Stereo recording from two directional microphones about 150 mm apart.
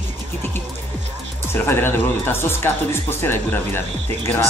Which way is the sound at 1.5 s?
15° left (ahead or behind).